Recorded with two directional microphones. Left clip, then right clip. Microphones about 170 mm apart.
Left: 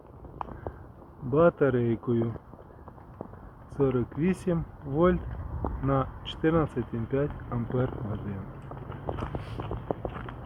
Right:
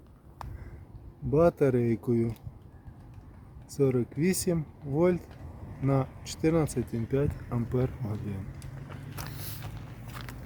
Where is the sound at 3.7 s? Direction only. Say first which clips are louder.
Even; 30° right (ahead or behind).